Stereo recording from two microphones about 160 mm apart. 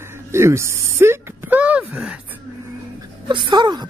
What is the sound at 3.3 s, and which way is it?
Speech, 30° right (ahead or behind).